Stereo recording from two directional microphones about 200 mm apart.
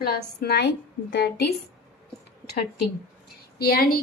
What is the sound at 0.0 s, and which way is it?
A woman's voice, 55° left (ahead or behind).